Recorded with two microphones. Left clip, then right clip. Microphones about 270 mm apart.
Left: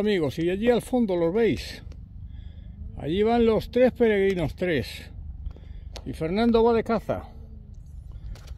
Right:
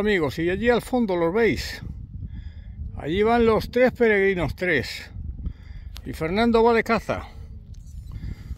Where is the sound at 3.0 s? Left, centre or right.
Centre.